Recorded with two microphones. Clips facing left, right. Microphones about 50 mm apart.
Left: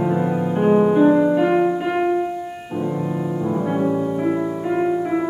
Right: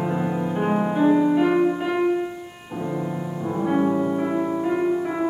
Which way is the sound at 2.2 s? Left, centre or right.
Centre.